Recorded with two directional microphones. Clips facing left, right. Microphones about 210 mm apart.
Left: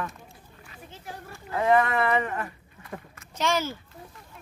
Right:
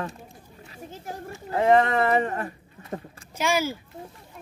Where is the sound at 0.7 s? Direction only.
45° right (ahead or behind).